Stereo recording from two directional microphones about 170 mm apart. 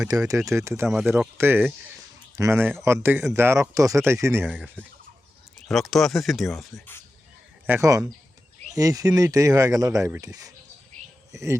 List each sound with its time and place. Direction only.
0.1 s speech: 20° right (ahead or behind)
4.8 s speech: 5° left (ahead or behind)
7.7 s speech: 20° right (ahead or behind)